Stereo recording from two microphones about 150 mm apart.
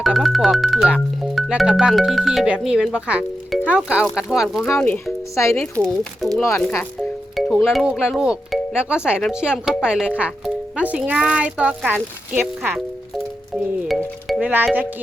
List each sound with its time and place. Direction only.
0.0 s speech: centre (ahead or behind)
5.3 s speech: 20° left (ahead or behind)
5.8 s speech: 5° left (ahead or behind)
7.3 s music: centre (ahead or behind)
7.7 s speech: 5° right (ahead or behind)
13.8 s music: centre (ahead or behind)